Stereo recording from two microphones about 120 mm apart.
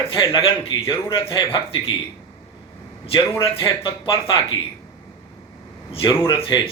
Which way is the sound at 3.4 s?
50° left (ahead or behind).